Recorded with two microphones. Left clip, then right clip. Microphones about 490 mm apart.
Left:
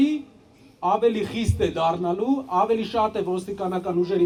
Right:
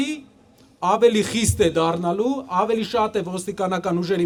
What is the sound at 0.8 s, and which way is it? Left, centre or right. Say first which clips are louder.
A man's voice: right 4 dB; right.